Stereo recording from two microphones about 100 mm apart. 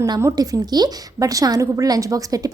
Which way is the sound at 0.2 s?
35° right (ahead or behind).